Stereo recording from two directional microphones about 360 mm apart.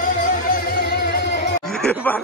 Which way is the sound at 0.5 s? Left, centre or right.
Left.